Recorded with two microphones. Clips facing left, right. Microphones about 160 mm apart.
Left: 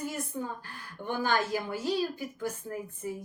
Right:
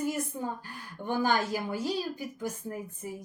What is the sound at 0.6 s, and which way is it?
A woman's voice, 15° right (ahead or behind).